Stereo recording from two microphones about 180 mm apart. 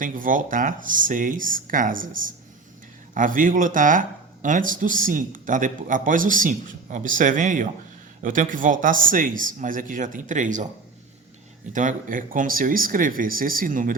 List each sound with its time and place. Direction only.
0.0 s speech: 50° right (ahead or behind)
11.7 s speech: 45° right (ahead or behind)